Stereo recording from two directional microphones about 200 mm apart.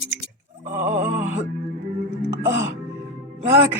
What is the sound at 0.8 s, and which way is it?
Speech, 10° right (ahead or behind).